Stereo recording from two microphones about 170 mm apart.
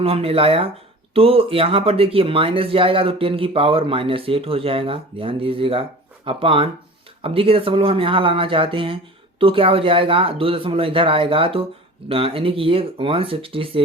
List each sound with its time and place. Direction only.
0.0 s speech: 35° right (ahead or behind)